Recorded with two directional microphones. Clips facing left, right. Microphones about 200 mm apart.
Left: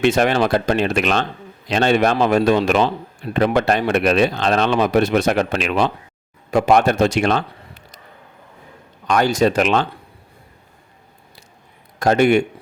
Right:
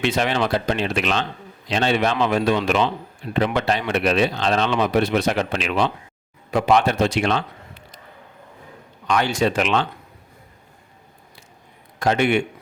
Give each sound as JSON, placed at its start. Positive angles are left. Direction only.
{"t": 0.0, "sound": "speech", "side_deg": 50}
{"t": 9.0, "sound": "speech", "side_deg": 45}
{"t": 11.9, "sound": "a man's voice", "side_deg": 40}